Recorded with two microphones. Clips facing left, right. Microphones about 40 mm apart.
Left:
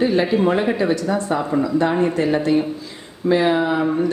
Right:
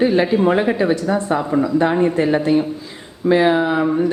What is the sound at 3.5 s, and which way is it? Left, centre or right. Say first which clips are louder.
Speech: right 2 dB; centre.